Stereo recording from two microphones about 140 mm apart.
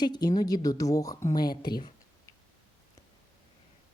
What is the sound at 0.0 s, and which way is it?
Speech, 30° left (ahead or behind).